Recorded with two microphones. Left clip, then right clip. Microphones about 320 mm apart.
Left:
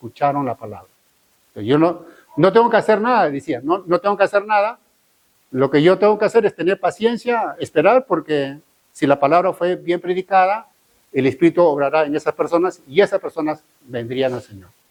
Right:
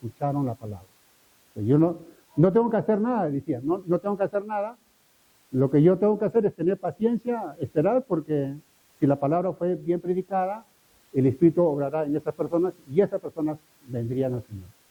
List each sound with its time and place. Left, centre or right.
0.2 s a man's voice: centre